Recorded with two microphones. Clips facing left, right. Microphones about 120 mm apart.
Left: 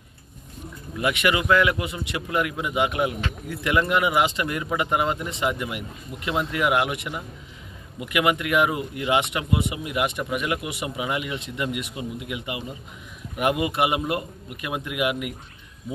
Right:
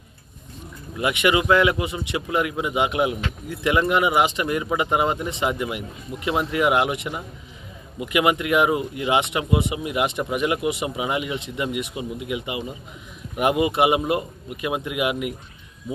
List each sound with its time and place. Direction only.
0.9 s speech: 20° right (ahead or behind)